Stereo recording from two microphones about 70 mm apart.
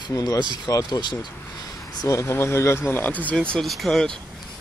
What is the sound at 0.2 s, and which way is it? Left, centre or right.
Speech, left.